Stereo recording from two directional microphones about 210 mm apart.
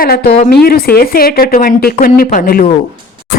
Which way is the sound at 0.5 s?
45° left (ahead or behind).